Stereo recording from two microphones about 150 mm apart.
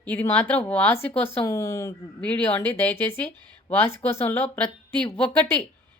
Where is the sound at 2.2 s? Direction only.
10° left (ahead or behind).